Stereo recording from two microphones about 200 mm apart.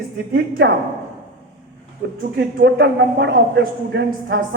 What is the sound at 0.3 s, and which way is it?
Speech, 55° right (ahead or behind).